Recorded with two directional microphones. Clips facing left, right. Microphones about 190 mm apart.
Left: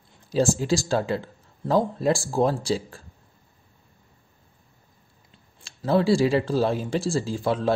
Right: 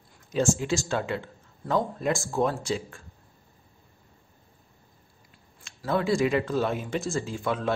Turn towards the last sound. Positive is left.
turn(degrees=30)  # may be behind; listen again after turning